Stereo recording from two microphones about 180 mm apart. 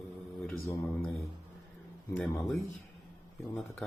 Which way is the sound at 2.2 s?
Centre (ahead or behind).